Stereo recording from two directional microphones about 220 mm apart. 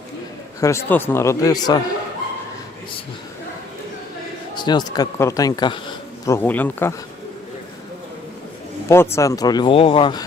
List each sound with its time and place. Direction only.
0.6 s speech: 10° left (ahead or behind)
4.5 s speech: 20° left (ahead or behind)
8.9 s speech: 10° left (ahead or behind)